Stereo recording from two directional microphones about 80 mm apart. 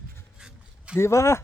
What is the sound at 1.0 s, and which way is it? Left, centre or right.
Speech, left.